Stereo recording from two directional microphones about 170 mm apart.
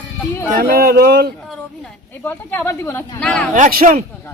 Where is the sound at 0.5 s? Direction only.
60° right (ahead or behind).